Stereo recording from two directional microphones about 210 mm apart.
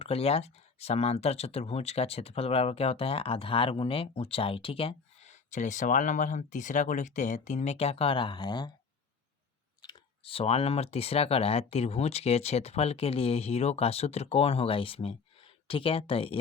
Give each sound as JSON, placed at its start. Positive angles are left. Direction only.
{"t": 0.0, "sound": "speech", "side_deg": 30}
{"t": 9.8, "sound": "speech", "side_deg": 25}